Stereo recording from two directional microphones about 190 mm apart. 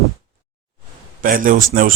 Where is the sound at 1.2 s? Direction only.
45° right (ahead or behind).